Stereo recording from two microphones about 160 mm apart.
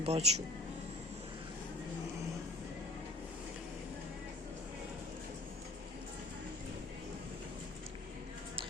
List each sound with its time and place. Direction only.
0.0 s speech: 40° right (ahead or behind)